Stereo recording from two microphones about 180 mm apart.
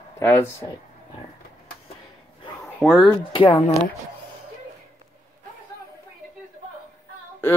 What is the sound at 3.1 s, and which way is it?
Speech, 30° left (ahead or behind).